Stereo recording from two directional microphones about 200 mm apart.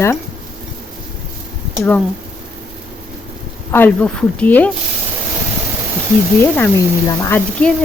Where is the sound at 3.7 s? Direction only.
10° left (ahead or behind).